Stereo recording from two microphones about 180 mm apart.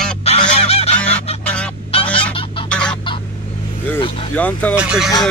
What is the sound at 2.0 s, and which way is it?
Fowl, 5° left (ahead or behind).